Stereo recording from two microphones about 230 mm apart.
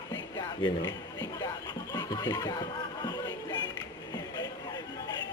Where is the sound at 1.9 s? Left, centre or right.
Centre.